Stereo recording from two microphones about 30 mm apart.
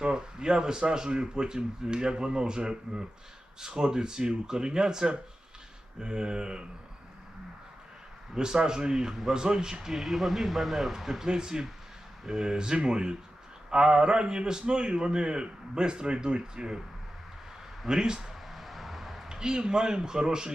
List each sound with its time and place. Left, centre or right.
0.0 s a man's voice: right
8.4 s a man's voice: right
10.0 s speech: centre
11.3 s a man's voice: right
17.8 s a man's voice: right
18.5 s a sound: centre
19.3 s a man's voice: right